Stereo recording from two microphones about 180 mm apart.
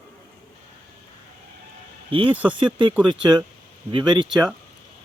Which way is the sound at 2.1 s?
30° right (ahead or behind).